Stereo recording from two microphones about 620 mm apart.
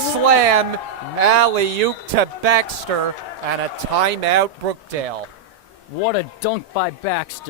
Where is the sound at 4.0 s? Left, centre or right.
Right.